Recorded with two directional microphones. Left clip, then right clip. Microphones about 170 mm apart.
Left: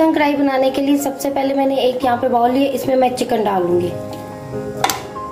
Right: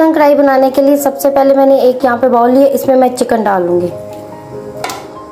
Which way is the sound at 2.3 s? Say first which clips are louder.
Right 7 dB; centre (ahead or behind).